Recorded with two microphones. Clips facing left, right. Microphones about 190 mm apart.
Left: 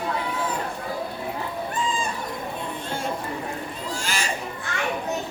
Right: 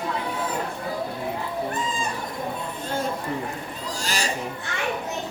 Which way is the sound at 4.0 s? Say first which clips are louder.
Right 3 dB; 35° right (ahead or behind).